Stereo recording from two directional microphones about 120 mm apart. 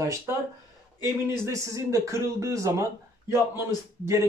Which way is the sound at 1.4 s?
25° right (ahead or behind).